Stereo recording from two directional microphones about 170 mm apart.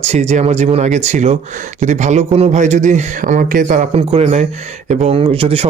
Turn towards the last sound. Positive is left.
turn(degrees=-35)  # may be behind; listen again after turning